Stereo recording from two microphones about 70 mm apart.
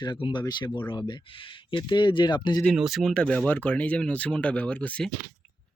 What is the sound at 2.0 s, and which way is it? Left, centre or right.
Speech, left.